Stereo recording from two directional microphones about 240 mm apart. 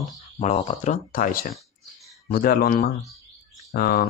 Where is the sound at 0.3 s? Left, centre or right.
Left.